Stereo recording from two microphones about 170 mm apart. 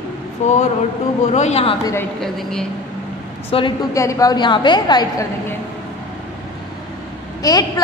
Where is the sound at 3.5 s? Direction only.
30° left (ahead or behind).